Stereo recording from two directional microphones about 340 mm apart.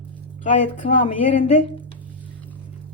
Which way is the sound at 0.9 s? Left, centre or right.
Left.